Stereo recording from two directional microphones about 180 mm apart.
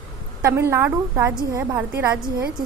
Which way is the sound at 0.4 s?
15° right (ahead or behind).